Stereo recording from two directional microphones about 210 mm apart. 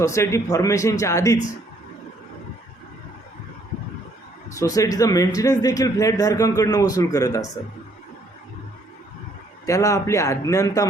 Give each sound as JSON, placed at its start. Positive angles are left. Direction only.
{"t": 0.0, "sound": "speech", "side_deg": 15}
{"t": 4.4, "sound": "speech", "side_deg": 15}
{"t": 9.6, "sound": "speech", "side_deg": 15}